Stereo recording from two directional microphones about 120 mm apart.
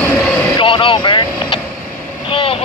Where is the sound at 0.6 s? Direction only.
45° left (ahead or behind).